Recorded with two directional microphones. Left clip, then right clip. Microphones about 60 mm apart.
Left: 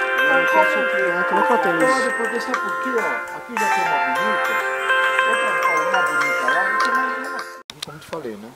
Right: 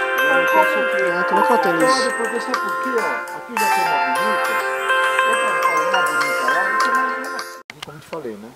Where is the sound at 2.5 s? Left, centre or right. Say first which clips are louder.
Right 1 dB; right.